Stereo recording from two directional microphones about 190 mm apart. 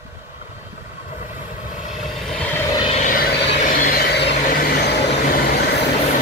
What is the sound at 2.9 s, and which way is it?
Vehicle, 45° left (ahead or behind).